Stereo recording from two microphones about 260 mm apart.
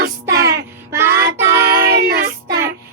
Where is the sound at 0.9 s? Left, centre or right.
Centre.